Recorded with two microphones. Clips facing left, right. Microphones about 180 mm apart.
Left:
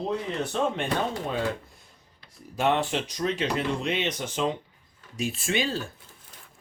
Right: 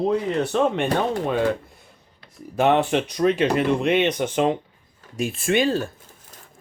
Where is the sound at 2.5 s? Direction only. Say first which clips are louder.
Right 6 dB; 60° right (ahead or behind).